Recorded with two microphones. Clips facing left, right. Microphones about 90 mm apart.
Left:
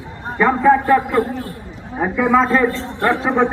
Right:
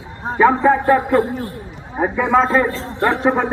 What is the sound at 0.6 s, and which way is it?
A man's voice, 15° right (ahead or behind).